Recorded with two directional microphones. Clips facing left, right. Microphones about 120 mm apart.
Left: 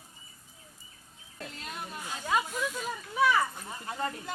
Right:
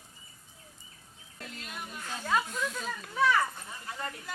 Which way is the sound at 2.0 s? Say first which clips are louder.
Even; 15° left (ahead or behind).